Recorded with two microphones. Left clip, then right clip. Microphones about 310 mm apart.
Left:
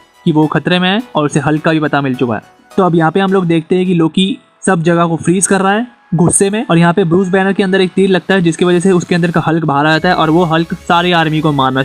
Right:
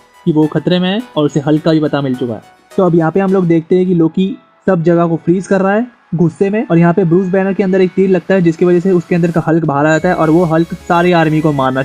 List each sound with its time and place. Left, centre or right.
0.3 s speech: left